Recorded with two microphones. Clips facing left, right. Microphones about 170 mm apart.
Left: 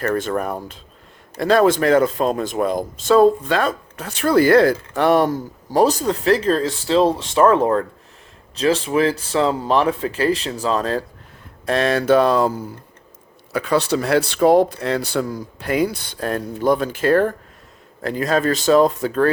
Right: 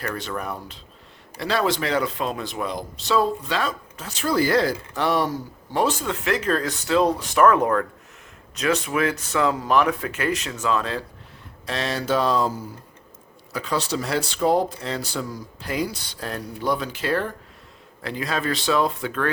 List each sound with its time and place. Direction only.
0.0 s speech: 50° left (ahead or behind)
5.7 s speech: 40° left (ahead or behind)
11.6 s speech: 55° left (ahead or behind); by 19.3 s 40° left (ahead or behind)